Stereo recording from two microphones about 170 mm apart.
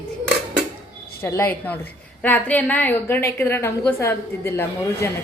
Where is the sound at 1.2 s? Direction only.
15° left (ahead or behind).